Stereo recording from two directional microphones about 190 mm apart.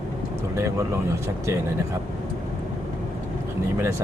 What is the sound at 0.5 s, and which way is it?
Speech, 15° right (ahead or behind).